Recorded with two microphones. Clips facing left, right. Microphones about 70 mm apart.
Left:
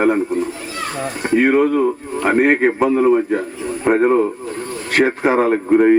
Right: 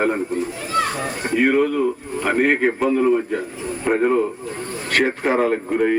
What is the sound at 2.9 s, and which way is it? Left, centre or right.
Speech, left.